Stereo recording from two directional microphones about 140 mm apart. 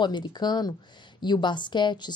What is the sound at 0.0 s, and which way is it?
A woman's voice, 30° left (ahead or behind).